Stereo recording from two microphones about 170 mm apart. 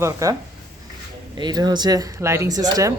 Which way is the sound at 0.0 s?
20° right (ahead or behind).